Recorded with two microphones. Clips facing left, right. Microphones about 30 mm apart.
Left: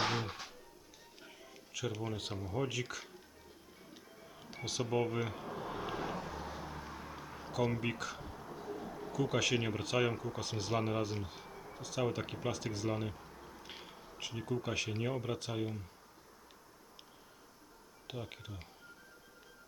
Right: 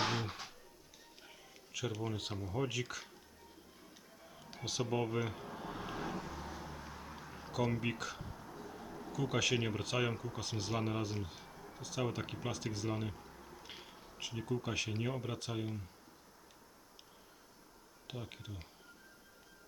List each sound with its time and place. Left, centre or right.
0.0 s music: centre
1.2 s speech: centre
4.5 s a sound: centre
7.5 s speech: centre
8.2 s bird: centre
9.1 s speech: centre
18.1 s speech: centre